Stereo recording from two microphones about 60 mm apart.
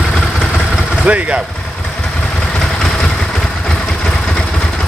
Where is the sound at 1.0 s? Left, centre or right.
Right.